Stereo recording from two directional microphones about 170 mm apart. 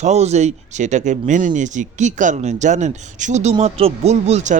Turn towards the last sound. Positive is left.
turn(degrees=-40)  # may be behind; listen again after turning